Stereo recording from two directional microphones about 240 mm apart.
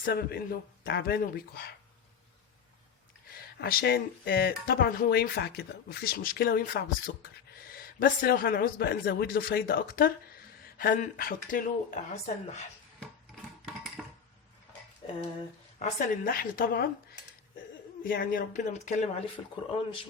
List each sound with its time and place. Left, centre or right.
0.0 s speech: left
3.6 s speech: left
13.3 s music: centre
14.0 s dishes: centre
15.8 s speech: left
18.0 s speech: left
19.4 s speech: centre